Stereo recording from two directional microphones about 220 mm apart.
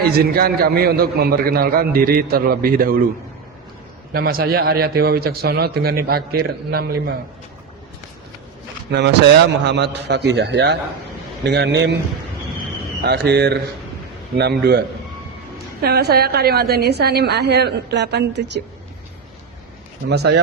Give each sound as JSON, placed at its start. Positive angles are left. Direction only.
{"t": 0.0, "sound": "a man's voice", "side_deg": -45}
{"t": 4.1, "sound": "a man's voice", "side_deg": -45}
{"t": 8.9, "sound": "a man's voice", "side_deg": -50}
{"t": 13.0, "sound": "a man's voice", "side_deg": -50}
{"t": 14.6, "sound": "a man's voice", "side_deg": -45}
{"t": 20.1, "sound": "a man's voice", "side_deg": -50}